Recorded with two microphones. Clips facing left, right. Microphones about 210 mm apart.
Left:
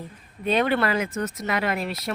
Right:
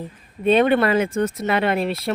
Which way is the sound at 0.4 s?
25° right (ahead or behind).